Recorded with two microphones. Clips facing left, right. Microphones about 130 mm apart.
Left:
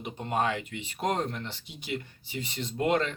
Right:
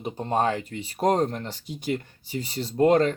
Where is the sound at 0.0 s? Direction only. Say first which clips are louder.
Right 5 dB; 35° right (ahead or behind).